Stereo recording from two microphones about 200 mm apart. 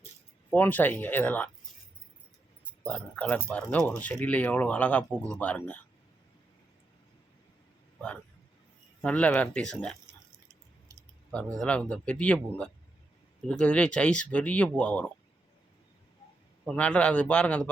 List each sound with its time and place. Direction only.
0.5 s speech: 10° left (ahead or behind)
2.8 s speech: 5° left (ahead or behind)
9.0 s speech: 5° left (ahead or behind)
11.3 s speech: 5° left (ahead or behind)
16.6 s speech: 5° left (ahead or behind)